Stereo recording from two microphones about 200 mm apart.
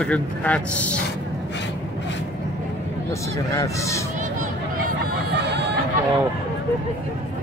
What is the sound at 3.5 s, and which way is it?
Speech, 15° left (ahead or behind).